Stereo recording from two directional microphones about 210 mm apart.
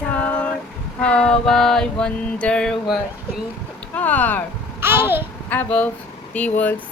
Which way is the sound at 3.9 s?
5° left (ahead or behind).